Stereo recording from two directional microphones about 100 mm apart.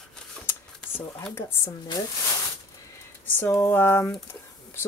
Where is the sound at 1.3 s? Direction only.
25° left (ahead or behind).